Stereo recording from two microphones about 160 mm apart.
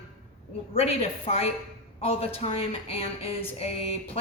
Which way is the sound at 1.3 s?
35° left (ahead or behind).